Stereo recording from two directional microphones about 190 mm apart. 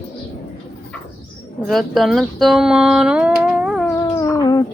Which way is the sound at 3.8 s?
20° left (ahead or behind).